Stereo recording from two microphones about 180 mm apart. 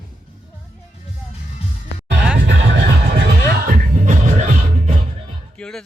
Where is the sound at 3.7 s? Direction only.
45° right (ahead or behind).